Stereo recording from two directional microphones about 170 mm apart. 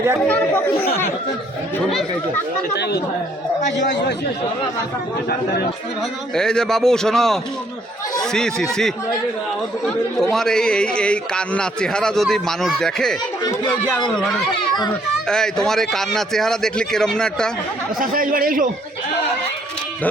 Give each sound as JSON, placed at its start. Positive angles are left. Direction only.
{"t": 0.3, "sound": "speech", "side_deg": 10}
{"t": 2.7, "sound": "speech", "side_deg": 75}
{"t": 6.3, "sound": "speech", "side_deg": 5}
{"t": 10.3, "sound": "speech", "side_deg": 5}
{"t": 14.2, "sound": "speech", "side_deg": 5}
{"t": 18.0, "sound": "speech", "side_deg": -55}